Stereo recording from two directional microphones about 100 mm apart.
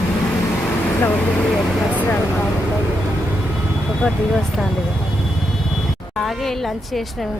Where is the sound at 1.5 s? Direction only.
15° left (ahead or behind).